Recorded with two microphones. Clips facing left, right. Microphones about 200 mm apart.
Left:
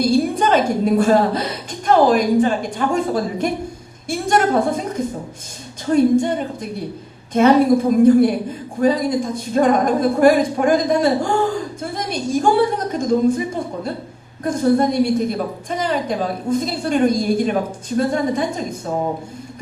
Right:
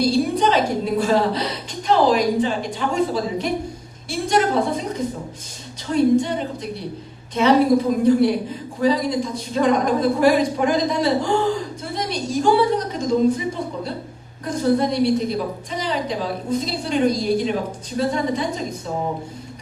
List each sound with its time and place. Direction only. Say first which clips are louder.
0.0 s a woman's voice: left 2 dB; 50° left (ahead or behind)
14.4 s a woman's voice: left 3 dB; 50° left (ahead or behind)